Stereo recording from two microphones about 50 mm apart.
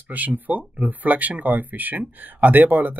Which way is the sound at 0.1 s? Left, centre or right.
Right.